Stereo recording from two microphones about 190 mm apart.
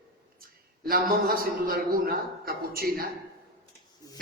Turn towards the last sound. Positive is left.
turn(degrees=-50)  # may be behind; listen again after turning